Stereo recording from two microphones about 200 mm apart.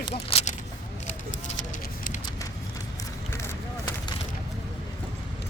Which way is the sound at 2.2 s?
15° left (ahead or behind).